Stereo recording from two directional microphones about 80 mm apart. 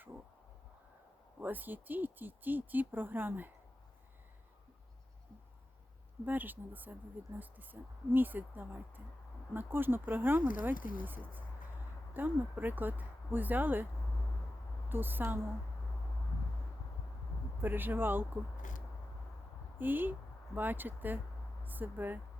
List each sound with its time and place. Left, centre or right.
1.4 s speech: right
6.2 s speech: right
14.8 s speech: right
17.6 s speech: right
19.8 s speech: right